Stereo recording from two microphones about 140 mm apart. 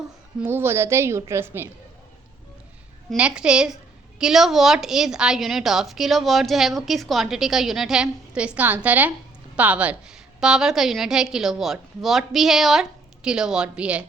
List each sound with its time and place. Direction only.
0.3 s a woman's voice: 15° right (ahead or behind)
3.2 s a woman's voice: 5° right (ahead or behind)